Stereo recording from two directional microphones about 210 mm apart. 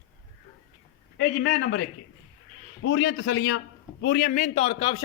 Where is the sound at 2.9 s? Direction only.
80° left.